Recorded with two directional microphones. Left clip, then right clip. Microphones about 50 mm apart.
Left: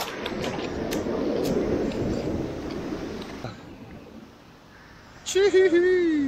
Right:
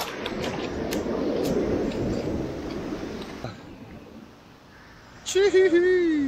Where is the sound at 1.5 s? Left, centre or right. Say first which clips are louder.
Even; right.